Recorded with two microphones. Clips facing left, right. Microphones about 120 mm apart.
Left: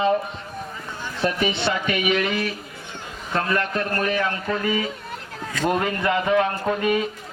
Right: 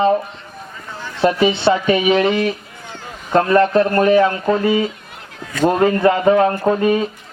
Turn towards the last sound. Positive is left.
turn(degrees=-30)  # may be behind; listen again after turning